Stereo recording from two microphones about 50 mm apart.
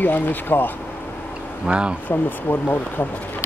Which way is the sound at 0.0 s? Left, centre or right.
Left.